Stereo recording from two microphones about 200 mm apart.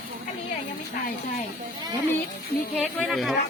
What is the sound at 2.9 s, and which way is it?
Speech, centre (ahead or behind).